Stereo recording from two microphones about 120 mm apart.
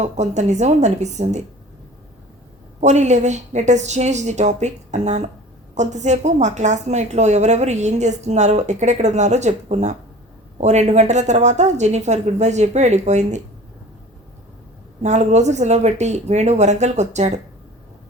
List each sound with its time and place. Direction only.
0.0 s a woman's voice: 75° right (ahead or behind)
2.8 s a woman's voice: 75° right (ahead or behind)
15.0 s a woman's voice: 70° right (ahead or behind)